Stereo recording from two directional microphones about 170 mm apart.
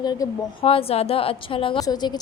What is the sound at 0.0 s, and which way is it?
Speech, 25° left (ahead or behind).